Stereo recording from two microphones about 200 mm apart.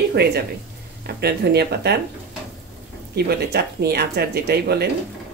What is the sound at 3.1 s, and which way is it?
Speech, 55° right (ahead or behind).